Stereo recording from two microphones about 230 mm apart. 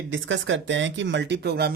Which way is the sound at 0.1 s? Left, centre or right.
Right.